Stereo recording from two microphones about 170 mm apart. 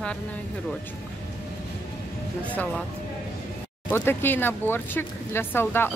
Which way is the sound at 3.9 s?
10° left (ahead or behind).